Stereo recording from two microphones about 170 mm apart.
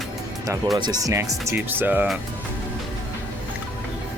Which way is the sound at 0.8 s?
20° right (ahead or behind).